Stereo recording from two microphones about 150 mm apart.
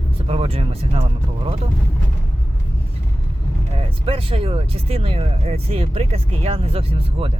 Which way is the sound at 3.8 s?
40° right (ahead or behind).